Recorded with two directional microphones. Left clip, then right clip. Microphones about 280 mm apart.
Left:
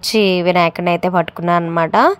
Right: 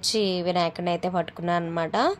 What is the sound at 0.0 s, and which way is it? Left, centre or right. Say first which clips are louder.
Speech: left 10 dB; left.